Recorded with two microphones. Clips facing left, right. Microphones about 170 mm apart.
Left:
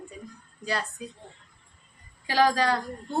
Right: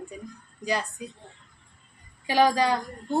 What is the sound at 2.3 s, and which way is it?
Speech, 15° right (ahead or behind).